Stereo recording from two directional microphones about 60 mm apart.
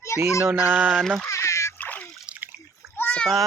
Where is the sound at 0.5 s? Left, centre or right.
Right.